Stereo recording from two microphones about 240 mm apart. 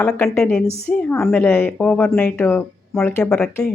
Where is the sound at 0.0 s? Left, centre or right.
Centre.